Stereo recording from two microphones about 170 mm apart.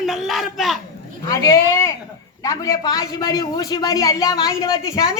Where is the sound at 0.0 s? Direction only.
Centre (ahead or behind).